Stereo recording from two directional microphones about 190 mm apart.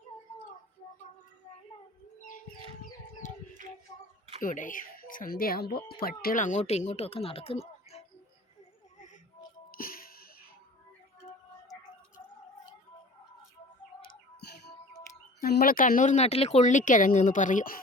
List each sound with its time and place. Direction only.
4.4 s speech: 45° left (ahead or behind)
9.7 s music: 50° left (ahead or behind)
15.4 s speech: 55° left (ahead or behind)